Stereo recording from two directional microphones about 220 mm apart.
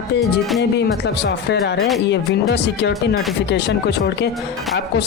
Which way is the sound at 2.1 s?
55° left (ahead or behind).